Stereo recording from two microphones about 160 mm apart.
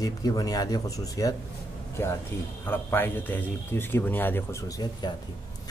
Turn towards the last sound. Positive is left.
turn(degrees=25)  # may be behind; listen again after turning